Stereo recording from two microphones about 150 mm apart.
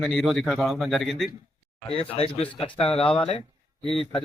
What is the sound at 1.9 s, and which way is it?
Speech, 40° left (ahead or behind).